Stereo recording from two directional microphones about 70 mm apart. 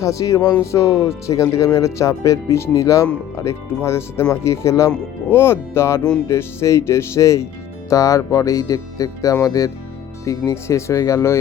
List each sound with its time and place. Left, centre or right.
0.0 s speech: left
0.6 s speech: left
5.3 s speech: left